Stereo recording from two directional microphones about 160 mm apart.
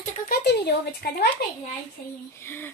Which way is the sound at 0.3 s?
90° left.